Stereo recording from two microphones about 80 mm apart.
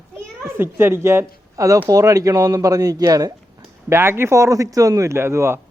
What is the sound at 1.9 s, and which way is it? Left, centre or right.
Speech, right.